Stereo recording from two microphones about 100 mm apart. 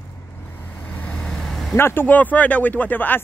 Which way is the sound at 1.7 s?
25° left (ahead or behind).